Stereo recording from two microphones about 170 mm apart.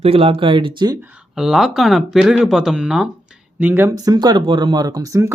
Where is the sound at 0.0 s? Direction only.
35° right (ahead or behind).